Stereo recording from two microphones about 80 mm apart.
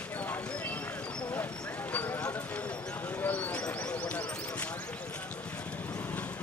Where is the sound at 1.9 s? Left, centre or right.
Left.